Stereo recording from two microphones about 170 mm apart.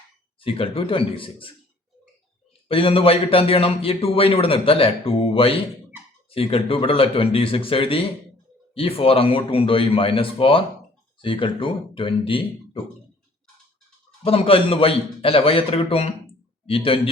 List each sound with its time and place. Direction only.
0.3 s speech: 30° left (ahead or behind)
2.6 s speech: 35° left (ahead or behind)
14.3 s speech: 35° left (ahead or behind)